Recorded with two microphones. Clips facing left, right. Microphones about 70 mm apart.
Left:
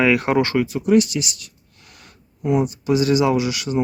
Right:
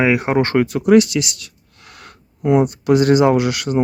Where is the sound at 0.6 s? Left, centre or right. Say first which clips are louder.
Right 4 dB; right.